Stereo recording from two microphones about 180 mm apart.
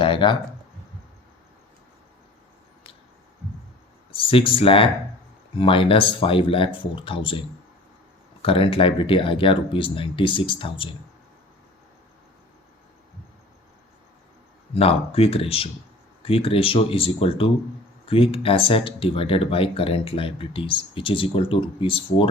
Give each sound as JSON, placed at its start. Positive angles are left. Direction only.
{"t": 0.0, "sound": "speech", "side_deg": 30}
{"t": 4.1, "sound": "speech", "side_deg": 30}
{"t": 8.4, "sound": "speech", "side_deg": 30}
{"t": 14.8, "sound": "speech", "side_deg": 35}